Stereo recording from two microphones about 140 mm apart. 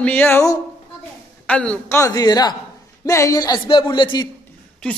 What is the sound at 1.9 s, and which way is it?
Speech, 25° left (ahead or behind).